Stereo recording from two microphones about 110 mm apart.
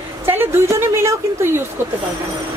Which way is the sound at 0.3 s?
20° right (ahead or behind).